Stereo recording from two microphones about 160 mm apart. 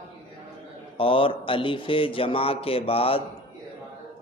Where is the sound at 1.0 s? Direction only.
35° left (ahead or behind).